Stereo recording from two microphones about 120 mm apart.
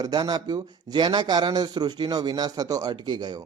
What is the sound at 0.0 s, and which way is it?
A man's voice, 35° right (ahead or behind).